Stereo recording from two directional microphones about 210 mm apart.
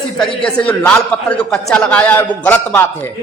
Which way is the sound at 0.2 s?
5° left (ahead or behind).